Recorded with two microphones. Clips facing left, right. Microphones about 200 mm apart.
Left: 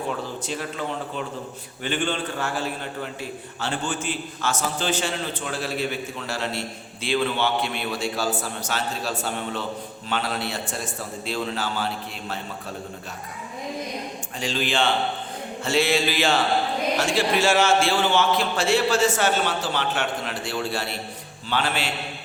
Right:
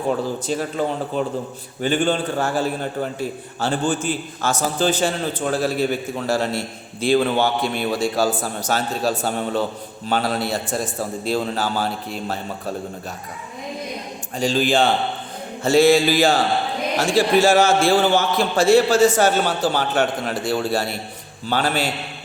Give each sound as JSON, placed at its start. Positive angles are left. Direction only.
{"t": 0.1, "sound": "a man's voice", "side_deg": -40}
{"t": 14.3, "sound": "a man's voice", "side_deg": -40}